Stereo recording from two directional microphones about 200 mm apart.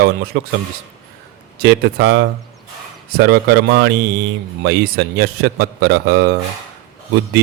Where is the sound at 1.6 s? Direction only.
55° right (ahead or behind).